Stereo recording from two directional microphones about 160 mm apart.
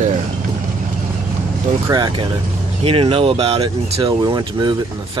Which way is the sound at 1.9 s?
25° right (ahead or behind).